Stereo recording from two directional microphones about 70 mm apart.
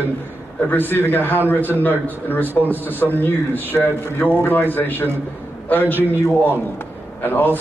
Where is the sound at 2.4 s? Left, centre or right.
Right.